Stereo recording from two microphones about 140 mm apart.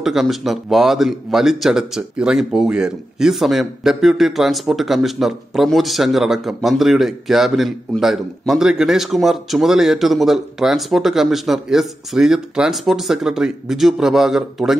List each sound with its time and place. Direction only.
0.0 s speech: centre (ahead or behind)